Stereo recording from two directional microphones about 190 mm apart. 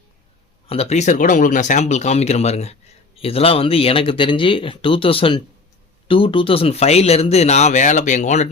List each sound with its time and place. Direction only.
0.7 s speech: 35° left (ahead or behind)